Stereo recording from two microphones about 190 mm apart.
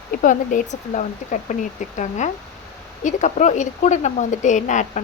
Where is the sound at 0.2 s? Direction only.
45° left (ahead or behind).